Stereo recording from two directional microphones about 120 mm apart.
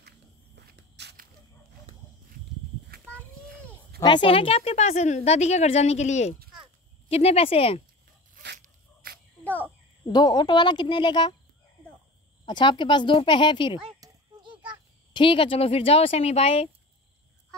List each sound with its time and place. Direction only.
4.0 s a woman's voice: 40° left (ahead or behind); by 6.3 s 70° left (ahead or behind)
7.1 s a woman's voice: 55° left (ahead or behind)
9.4 s a sound: 15° left (ahead or behind)
10.0 s speech: 35° left (ahead or behind)
12.4 s speech: 40° left (ahead or behind)
15.1 s a woman's voice: 45° left (ahead or behind)